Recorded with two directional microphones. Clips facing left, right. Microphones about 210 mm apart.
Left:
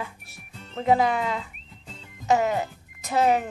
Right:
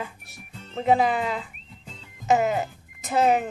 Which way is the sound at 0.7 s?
5° right (ahead or behind).